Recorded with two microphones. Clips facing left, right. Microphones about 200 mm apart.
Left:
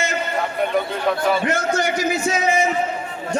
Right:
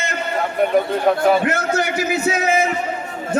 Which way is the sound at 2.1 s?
60° right (ahead or behind).